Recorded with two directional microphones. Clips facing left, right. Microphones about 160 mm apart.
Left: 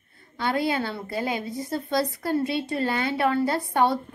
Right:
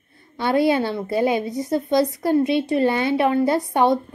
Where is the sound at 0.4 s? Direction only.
20° right (ahead or behind).